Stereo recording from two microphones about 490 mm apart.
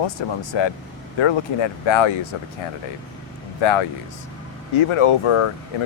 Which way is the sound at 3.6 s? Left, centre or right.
Left.